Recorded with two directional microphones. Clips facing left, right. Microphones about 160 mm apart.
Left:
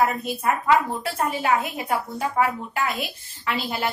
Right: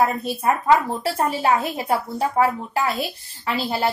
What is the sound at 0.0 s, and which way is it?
A woman's voice, 30° right (ahead or behind).